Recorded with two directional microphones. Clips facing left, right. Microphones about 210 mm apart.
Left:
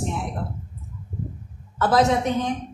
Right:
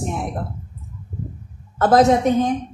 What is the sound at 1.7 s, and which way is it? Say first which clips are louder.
Speech: right 5 dB; 45° right (ahead or behind).